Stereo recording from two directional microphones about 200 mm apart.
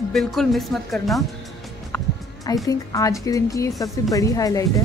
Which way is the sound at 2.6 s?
15° left (ahead or behind).